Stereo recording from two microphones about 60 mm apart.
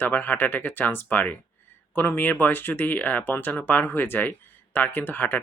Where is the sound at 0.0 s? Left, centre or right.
Left.